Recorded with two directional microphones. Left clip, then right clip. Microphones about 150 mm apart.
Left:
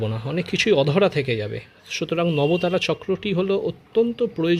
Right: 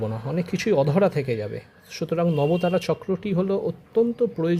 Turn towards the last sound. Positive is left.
turn(degrees=15)  # may be behind; listen again after turning